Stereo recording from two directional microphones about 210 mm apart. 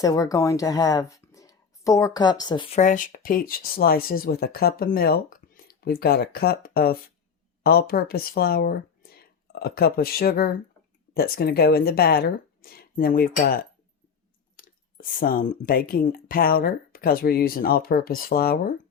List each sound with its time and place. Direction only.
0.0 s speech: 15° left (ahead or behind)
2.7 s speech: 35° left (ahead or behind)
14.6 s clicking: 45° left (ahead or behind)
15.2 s speech: 40° left (ahead or behind)